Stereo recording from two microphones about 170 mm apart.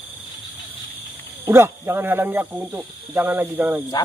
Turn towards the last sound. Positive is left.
turn(degrees=-10)  # may be behind; listen again after turning